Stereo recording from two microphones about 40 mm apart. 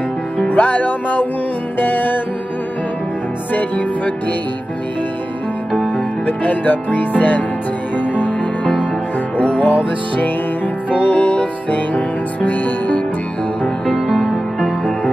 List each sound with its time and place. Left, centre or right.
0.5 s music: left
3.5 s music: left
6.2 s music: left
9.4 s music: left
11.1 s music: left
14.0 s music: centre